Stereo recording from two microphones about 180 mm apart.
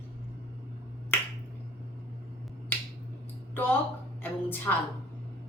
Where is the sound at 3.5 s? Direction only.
10° left (ahead or behind).